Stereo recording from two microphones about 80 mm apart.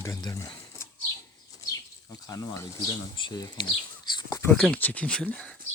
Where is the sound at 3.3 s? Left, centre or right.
Left.